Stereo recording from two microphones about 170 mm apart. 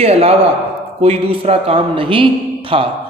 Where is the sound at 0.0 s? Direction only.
35° right (ahead or behind).